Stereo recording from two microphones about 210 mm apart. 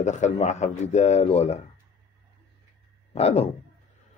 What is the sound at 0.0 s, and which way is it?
Speech, 35° left (ahead or behind).